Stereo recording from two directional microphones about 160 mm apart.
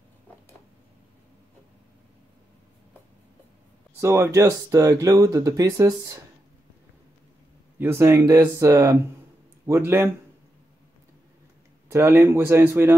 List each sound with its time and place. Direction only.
4.0 s speech: 15° right (ahead or behind)
7.8 s speech: 15° right (ahead or behind)
11.9 s speech: 15° right (ahead or behind)